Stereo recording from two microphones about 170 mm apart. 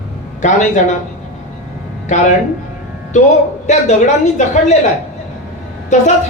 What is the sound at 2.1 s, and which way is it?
Speech, 45° left (ahead or behind).